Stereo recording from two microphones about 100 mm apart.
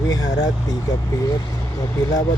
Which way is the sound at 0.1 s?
40° left (ahead or behind).